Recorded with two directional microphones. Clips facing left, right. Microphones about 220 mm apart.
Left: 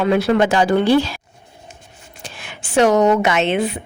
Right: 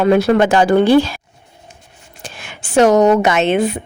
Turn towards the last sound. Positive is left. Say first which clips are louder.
# right 3 dB
turn(degrees=-45)  # may be behind; listen again after turning